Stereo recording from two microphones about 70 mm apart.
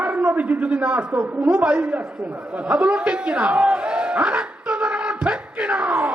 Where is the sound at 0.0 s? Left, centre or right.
Right.